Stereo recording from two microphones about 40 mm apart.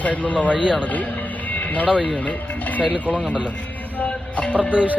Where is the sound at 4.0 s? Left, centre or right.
Left.